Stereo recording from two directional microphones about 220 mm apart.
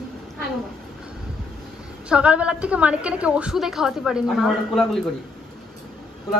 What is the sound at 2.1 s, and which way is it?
A woman's voice, 5° right (ahead or behind).